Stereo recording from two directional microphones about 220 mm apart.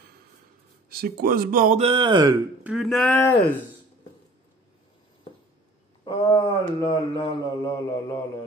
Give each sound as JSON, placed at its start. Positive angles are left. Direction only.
{"t": 0.8, "sound": "speech", "side_deg": -45}
{"t": 1.8, "sound": "speech", "side_deg": -25}
{"t": 2.6, "sound": "speech", "side_deg": 0}
{"t": 6.0, "sound": "mantra", "side_deg": 20}